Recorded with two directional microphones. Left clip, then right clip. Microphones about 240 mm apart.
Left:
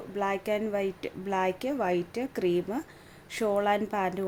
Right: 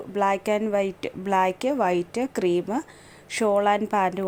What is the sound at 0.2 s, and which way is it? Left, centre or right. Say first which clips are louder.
A woman's voice: right 6 dB; right.